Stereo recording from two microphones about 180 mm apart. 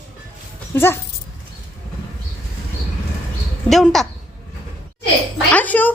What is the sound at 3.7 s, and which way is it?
Speech, centre (ahead or behind).